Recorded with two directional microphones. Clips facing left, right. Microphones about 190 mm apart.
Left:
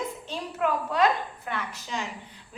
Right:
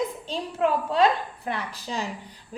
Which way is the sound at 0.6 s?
30° right (ahead or behind).